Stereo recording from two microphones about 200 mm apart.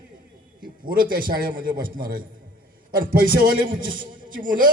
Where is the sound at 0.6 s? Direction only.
45° right (ahead or behind).